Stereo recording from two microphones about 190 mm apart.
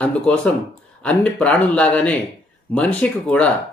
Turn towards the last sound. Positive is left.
turn(degrees=5)  # may be behind; listen again after turning